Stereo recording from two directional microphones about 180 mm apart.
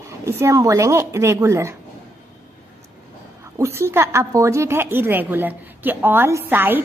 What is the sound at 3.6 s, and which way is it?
A woman's voice, 15° right (ahead or behind).